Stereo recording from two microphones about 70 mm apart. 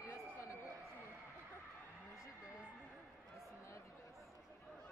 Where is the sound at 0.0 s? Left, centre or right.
Left.